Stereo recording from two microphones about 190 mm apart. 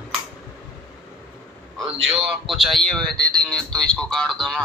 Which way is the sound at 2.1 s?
Centre (ahead or behind).